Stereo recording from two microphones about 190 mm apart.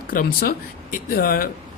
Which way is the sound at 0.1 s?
50° left (ahead or behind).